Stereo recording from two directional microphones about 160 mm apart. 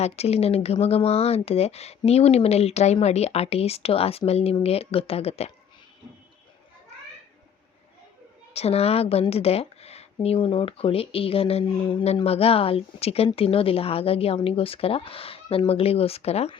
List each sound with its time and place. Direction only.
0.0 s speech: 40° left (ahead or behind)
8.5 s speech: 40° left (ahead or behind)